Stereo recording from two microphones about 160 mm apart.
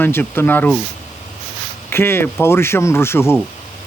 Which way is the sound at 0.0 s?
15° left (ahead or behind).